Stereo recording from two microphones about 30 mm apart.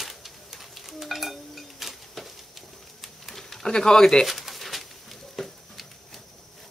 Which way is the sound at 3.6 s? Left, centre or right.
Left.